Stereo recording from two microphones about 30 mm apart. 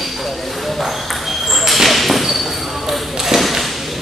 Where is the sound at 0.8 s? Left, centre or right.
Centre.